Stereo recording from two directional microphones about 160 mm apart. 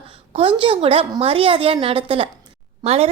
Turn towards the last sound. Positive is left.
turn(degrees=-40)  # may be behind; listen again after turning